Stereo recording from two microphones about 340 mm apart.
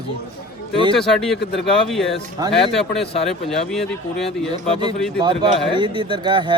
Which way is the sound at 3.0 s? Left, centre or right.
Centre.